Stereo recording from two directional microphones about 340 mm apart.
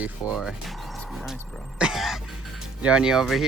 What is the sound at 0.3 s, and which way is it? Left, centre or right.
Speech, centre.